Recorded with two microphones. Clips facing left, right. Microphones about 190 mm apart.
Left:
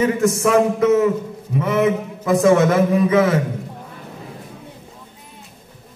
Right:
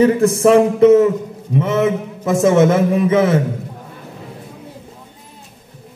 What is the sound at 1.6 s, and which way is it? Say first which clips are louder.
A man's voice: right 1 dB; 25° right (ahead or behind).